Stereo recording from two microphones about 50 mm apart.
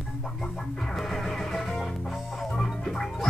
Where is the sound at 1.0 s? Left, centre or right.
Centre.